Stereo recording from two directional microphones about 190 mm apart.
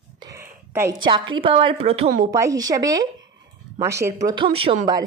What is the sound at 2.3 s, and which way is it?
A woman's voice, 15° right (ahead or behind).